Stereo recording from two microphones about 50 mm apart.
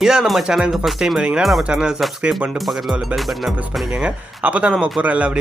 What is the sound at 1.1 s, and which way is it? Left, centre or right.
Speech, centre.